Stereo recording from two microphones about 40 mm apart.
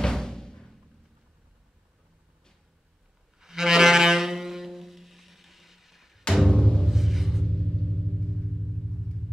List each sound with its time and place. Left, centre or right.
0.0 s music: centre
3.3 s saxophone: centre
6.5 s music: centre
6.9 s music: centre
7.4 s vehicle: left